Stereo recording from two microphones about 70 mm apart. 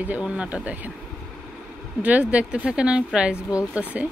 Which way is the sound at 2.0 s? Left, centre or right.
Right.